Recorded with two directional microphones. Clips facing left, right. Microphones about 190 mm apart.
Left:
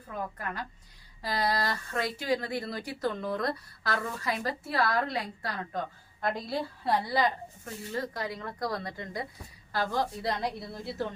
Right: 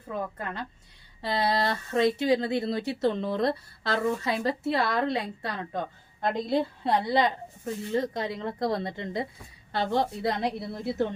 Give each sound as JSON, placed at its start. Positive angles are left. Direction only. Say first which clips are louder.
{"t": 0.1, "sound": "speech", "louder": "right 3 dB", "side_deg": -25}